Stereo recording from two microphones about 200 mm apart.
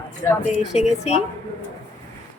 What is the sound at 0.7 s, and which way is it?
Speech, 30° left (ahead or behind).